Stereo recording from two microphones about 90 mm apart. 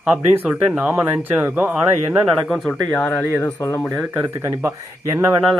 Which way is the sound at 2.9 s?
15° left (ahead or behind).